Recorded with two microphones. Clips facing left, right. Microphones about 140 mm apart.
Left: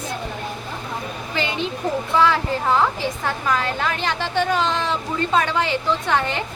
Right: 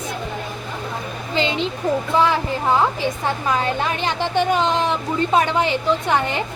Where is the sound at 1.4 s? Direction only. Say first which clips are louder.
Right 3 dB; 20° right (ahead or behind).